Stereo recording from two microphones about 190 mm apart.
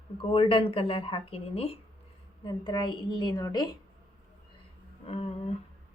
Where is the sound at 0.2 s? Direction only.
30° left (ahead or behind).